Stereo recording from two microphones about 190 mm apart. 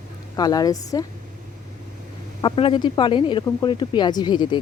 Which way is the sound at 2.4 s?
25° left (ahead or behind).